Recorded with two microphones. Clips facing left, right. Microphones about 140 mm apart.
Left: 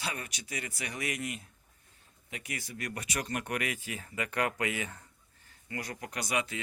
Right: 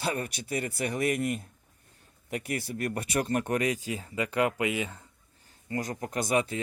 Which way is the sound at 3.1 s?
35° right (ahead or behind).